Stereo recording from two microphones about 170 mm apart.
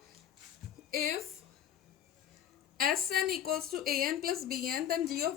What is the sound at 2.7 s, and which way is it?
A woman's voice, 60° right (ahead or behind).